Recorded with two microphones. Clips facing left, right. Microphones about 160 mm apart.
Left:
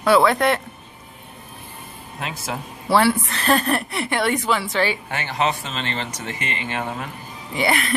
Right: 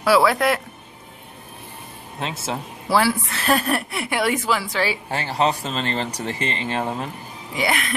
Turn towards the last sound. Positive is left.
turn(degrees=0)  # may be behind; listen again after turning